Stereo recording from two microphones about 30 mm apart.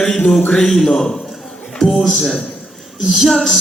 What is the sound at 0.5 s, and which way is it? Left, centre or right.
Speech, centre.